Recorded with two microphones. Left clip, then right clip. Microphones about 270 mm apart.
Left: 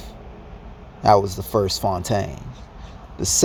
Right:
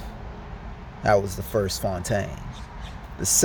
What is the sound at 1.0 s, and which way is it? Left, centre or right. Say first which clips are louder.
Speech: left 5 dB; centre.